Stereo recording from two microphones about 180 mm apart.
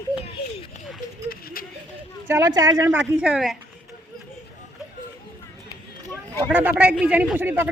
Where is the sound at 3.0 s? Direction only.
5° right (ahead or behind).